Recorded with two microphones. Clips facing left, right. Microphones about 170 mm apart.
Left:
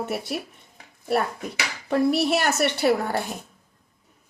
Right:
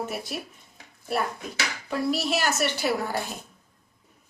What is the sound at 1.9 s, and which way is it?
Speech, 60° left (ahead or behind).